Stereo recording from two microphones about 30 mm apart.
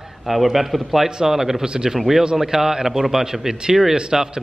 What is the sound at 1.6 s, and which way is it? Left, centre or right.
Speech, right.